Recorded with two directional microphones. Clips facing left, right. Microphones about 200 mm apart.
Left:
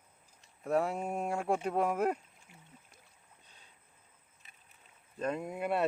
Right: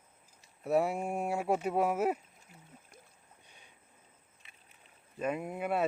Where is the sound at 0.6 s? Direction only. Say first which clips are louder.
Right 2 dB; 10° right (ahead or behind).